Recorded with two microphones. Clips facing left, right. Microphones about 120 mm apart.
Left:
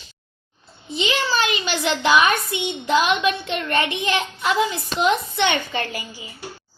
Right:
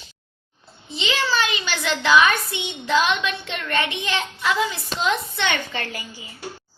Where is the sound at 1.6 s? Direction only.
25° left (ahead or behind).